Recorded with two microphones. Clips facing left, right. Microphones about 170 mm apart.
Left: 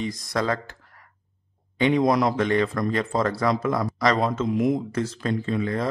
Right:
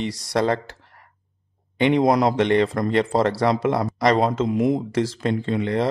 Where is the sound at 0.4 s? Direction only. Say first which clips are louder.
Right 4 dB; 25° right (ahead or behind).